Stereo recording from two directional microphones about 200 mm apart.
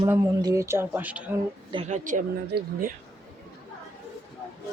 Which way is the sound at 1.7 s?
35° right (ahead or behind).